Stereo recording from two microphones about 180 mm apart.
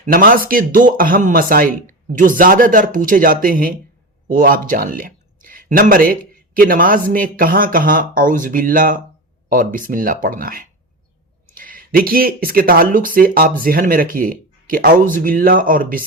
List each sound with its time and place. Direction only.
0.0 s speech: 50° right (ahead or behind)